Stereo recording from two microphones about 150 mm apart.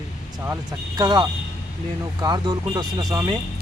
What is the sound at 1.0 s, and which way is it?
Speech, 30° right (ahead or behind).